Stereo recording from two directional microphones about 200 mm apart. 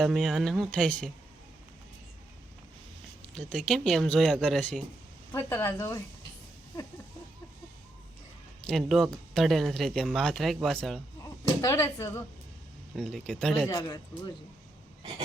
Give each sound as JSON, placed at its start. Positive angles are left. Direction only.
{"t": 0.0, "sound": "speech", "side_deg": 0}
{"t": 3.3, "sound": "speech", "side_deg": 5}
{"t": 8.6, "sound": "speech", "side_deg": 0}
{"t": 11.6, "sound": "speech", "side_deg": 15}
{"t": 13.0, "sound": "speech", "side_deg": 0}
{"t": 13.7, "sound": "a man's voice", "side_deg": 20}